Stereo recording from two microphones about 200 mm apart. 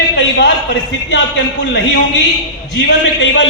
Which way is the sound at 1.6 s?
60° left (ahead or behind).